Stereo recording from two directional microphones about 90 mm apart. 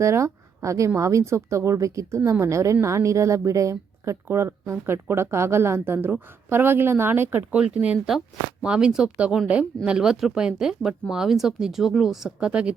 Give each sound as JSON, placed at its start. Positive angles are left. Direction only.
{"t": 0.0, "sound": "a woman's voice", "side_deg": -35}